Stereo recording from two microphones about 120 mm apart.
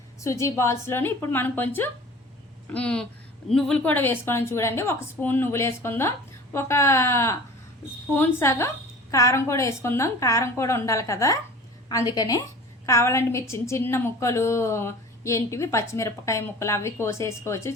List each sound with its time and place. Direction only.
0.2 s a woman's voice: 25° left (ahead or behind)